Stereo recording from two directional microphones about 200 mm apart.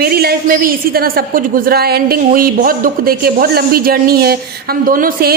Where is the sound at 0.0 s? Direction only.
50° right (ahead or behind).